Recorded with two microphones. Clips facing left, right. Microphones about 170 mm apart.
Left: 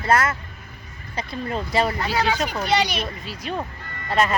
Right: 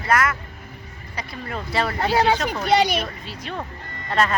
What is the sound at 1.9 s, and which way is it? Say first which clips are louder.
Speech: right 4 dB; 30° right (ahead or behind).